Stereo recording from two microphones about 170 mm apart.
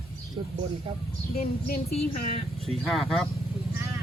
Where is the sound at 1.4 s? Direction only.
55° left (ahead or behind).